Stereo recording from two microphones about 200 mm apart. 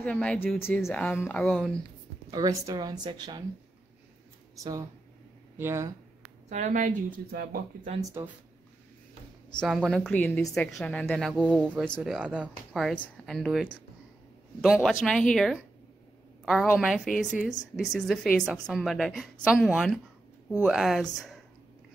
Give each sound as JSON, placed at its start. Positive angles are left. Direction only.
{"t": 0.0, "sound": "a woman's voice", "side_deg": 5}
{"t": 2.3, "sound": "a woman's voice", "side_deg": -20}
{"t": 5.6, "sound": "speech", "side_deg": -15}
{"t": 6.5, "sound": "speech", "side_deg": -35}
{"t": 8.0, "sound": "speech", "side_deg": -20}
{"t": 9.6, "sound": "a woman's voice", "side_deg": 5}